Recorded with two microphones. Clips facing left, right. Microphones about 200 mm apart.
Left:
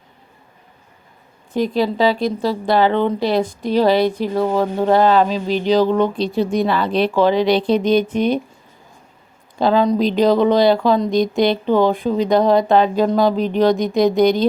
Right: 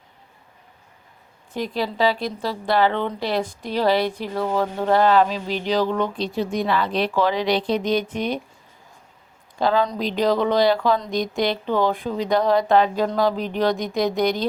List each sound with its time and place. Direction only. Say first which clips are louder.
1.5 s speech: left 7 dB; 20° left (ahead or behind)
9.6 s speech: left 6 dB; 20° left (ahead or behind)